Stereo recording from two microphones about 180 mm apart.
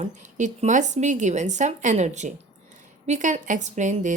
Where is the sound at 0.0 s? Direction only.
40° right (ahead or behind).